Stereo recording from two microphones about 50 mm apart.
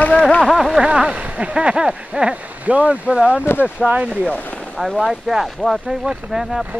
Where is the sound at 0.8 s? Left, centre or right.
Centre.